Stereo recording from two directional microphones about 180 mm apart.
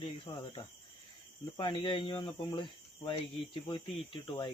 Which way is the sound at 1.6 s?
25° left (ahead or behind).